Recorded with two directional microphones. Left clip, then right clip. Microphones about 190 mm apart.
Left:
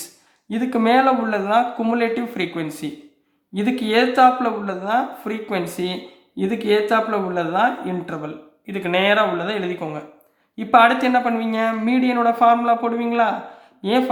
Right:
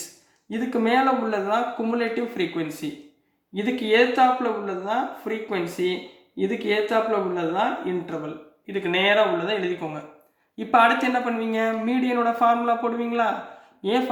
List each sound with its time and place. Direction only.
0.5 s speech: 35° left (ahead or behind)